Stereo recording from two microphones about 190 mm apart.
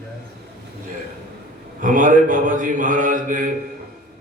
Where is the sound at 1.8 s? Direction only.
45° right (ahead or behind).